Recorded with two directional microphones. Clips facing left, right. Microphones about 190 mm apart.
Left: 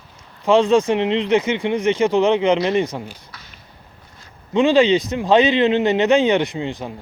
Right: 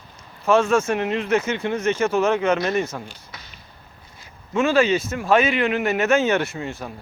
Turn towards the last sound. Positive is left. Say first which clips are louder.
# left 4 dB
turn(degrees=20)  # may be behind; listen again after turning